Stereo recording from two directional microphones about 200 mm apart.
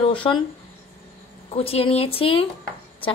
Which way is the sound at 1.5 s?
30° left (ahead or behind).